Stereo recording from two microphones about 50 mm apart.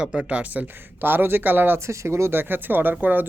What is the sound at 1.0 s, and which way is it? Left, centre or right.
Speech, right.